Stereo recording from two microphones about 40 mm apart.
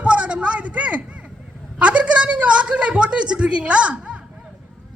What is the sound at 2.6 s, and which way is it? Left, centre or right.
A woman's voice, right.